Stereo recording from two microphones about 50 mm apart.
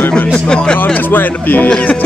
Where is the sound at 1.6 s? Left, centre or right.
Left.